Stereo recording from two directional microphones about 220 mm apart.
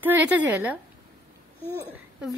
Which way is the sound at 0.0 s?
10° right (ahead or behind).